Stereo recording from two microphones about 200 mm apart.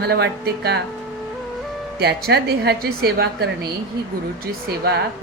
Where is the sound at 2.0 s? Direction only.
55° right (ahead or behind).